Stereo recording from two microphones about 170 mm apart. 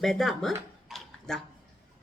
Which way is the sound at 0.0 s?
Centre (ahead or behind).